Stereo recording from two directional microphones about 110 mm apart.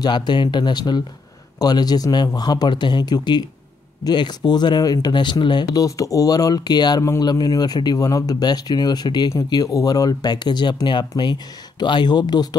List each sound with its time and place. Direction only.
0.0 s speech: 40° left (ahead or behind)